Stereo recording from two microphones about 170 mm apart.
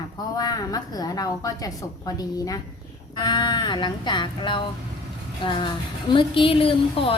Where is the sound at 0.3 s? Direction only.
20° left (ahead or behind).